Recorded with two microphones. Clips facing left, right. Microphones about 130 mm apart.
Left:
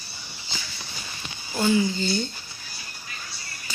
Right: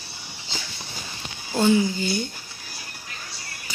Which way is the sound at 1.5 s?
20° right (ahead or behind).